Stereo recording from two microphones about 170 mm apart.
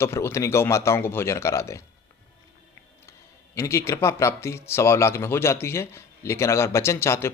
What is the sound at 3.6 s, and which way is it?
Speech, 15° left (ahead or behind).